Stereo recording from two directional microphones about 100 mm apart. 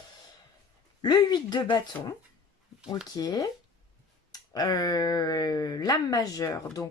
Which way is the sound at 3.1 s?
40° left (ahead or behind).